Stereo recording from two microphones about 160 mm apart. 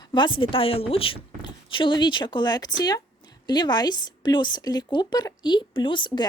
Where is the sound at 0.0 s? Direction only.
30° left (ahead or behind).